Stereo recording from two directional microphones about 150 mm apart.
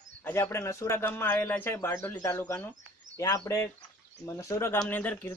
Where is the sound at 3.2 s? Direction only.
25° left (ahead or behind).